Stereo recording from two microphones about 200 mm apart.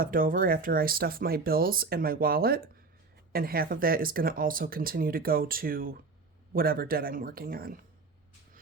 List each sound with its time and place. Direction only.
0.0 s speech: 45° right (ahead or behind)